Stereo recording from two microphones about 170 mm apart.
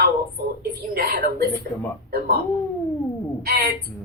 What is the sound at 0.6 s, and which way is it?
Speech, 65° right (ahead or behind).